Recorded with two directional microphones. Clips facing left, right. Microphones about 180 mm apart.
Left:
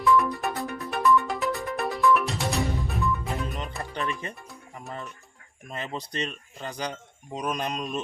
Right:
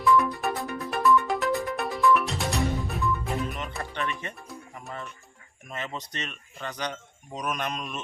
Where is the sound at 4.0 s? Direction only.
35° left (ahead or behind).